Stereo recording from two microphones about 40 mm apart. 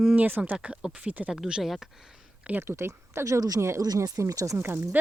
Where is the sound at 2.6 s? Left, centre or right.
Right.